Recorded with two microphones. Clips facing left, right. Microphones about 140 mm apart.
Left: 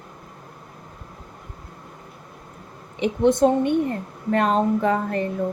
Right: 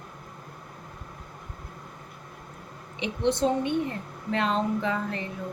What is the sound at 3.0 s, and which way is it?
Speech, 50° left (ahead or behind).